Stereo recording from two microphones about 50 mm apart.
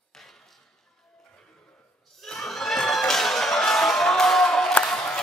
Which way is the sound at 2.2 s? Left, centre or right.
Centre.